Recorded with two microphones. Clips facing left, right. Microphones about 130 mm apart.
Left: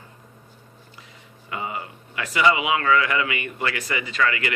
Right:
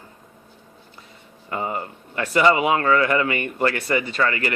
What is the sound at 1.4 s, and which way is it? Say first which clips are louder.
Speech: right 4 dB; 40° right (ahead or behind).